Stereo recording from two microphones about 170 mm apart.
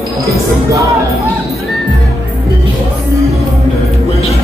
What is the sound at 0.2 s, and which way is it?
Speech, 20° right (ahead or behind).